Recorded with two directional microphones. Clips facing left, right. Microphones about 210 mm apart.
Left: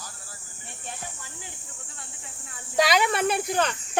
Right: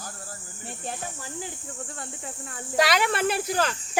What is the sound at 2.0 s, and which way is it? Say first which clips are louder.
Speech: right 9 dB; 50° right (ahead or behind).